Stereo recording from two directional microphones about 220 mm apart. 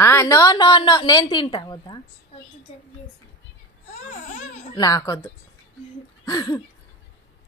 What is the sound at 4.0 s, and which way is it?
Babbling, 30° left (ahead or behind).